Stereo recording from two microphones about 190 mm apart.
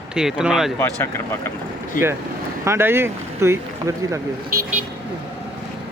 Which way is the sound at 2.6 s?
15° right (ahead or behind).